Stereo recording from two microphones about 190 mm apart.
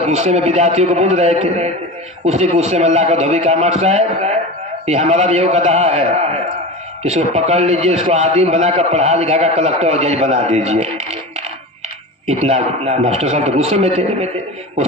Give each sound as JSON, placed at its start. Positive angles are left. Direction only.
{"t": 0.1, "sound": "a man's voice", "side_deg": -35}